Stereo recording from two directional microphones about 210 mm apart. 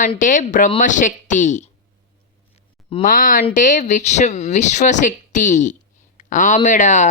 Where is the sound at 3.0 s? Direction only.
40° left (ahead or behind).